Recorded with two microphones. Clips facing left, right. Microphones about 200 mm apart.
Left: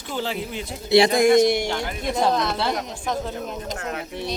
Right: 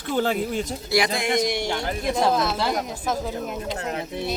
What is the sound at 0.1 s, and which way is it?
Speech, 50° right (ahead or behind).